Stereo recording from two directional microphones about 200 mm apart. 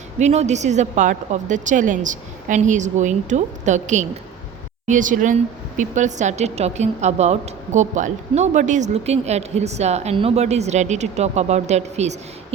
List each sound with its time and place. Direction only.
0.2 s speech: 35° right (ahead or behind)